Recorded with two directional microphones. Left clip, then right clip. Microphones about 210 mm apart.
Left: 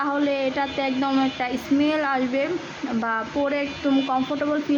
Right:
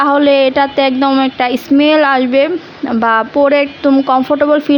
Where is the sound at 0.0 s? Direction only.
45° right (ahead or behind).